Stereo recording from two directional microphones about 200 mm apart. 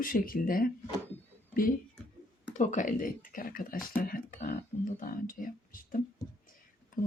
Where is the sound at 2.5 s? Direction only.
35° left (ahead or behind).